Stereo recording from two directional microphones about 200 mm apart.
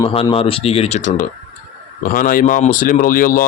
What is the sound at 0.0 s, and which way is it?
Speech, 25° left (ahead or behind).